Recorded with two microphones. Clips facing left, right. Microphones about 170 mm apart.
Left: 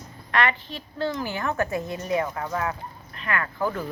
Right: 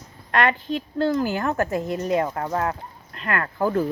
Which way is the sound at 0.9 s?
45° right (ahead or behind).